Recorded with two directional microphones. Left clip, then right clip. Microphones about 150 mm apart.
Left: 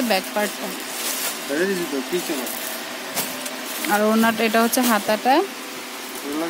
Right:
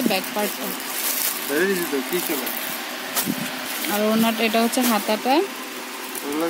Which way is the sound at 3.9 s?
5° left (ahead or behind).